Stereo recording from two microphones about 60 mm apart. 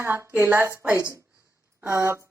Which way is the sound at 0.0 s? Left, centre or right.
Right.